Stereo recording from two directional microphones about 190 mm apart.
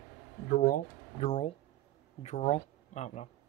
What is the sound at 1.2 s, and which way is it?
Speech, 30° left (ahead or behind).